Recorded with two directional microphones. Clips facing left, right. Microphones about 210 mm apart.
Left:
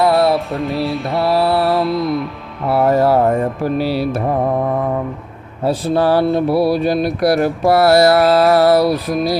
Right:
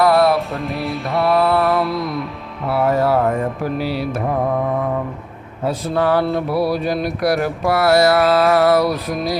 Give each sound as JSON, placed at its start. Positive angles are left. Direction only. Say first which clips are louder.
{"t": 0.0, "sound": "music", "louder": "even", "side_deg": 30}
{"t": 0.3, "sound": "music", "louder": "left 3 dB", "side_deg": 0}
{"t": 1.3, "sound": "mantra", "louder": "left 1 dB", "side_deg": 35}
{"t": 1.8, "sound": "music", "louder": "left 4 dB", "side_deg": 0}
{"t": 2.6, "sound": "music", "louder": "left 3 dB", "side_deg": 35}
{"t": 5.6, "sound": "music", "louder": "left 3 dB", "side_deg": 30}